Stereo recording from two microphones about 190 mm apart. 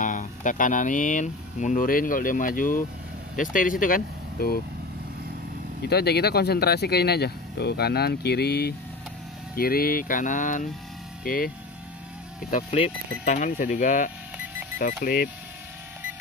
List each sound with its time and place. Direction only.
0.0 s speech: 40° left (ahead or behind)
5.8 s speech: 60° left (ahead or behind)